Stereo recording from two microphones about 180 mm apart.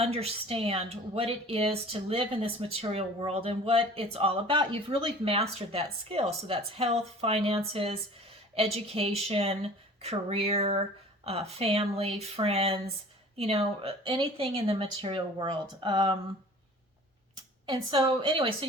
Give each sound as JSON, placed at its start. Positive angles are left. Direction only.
{"t": 0.0, "sound": "speech", "side_deg": -35}
{"t": 17.3, "sound": "speech", "side_deg": -20}